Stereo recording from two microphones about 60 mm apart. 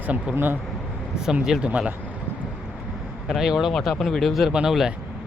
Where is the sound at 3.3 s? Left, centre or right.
Centre.